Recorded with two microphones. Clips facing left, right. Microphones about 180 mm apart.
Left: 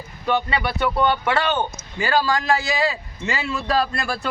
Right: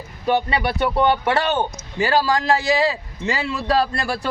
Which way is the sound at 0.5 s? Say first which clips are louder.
Right 2 dB; 15° right (ahead or behind).